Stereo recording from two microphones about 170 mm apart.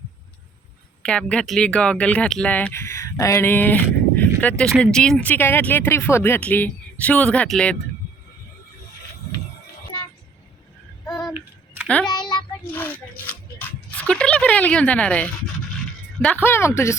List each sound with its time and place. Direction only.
1.0 s speech: 5° left (ahead or behind)
11.1 s a sound: centre (ahead or behind)
12.6 s speech: 10° left (ahead or behind)